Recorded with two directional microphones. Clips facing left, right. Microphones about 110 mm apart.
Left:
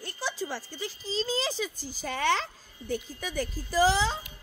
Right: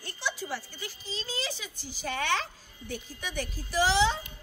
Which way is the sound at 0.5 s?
35° left (ahead or behind).